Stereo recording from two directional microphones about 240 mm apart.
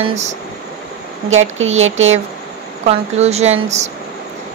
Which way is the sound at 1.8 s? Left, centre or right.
Right.